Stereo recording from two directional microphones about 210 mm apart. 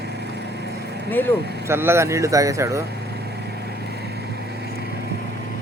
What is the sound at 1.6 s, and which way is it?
Speech, 10° right (ahead or behind).